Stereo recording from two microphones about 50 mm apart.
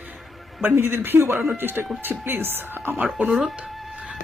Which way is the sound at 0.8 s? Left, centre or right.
Right.